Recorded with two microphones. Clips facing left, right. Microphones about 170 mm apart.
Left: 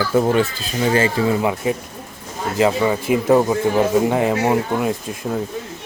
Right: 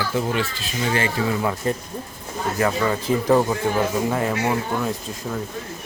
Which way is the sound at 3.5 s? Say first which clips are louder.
Left 5 dB; 20° left (ahead or behind).